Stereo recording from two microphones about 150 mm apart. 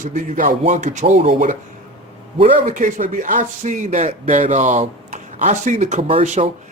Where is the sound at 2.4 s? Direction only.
55° right (ahead or behind).